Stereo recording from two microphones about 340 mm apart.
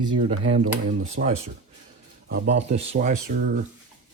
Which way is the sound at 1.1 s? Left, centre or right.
Centre.